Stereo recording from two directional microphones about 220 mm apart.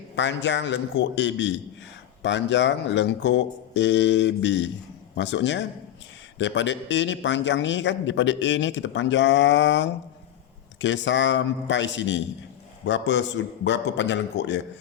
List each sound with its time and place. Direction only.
0.2 s a man's voice: 55° left (ahead or behind)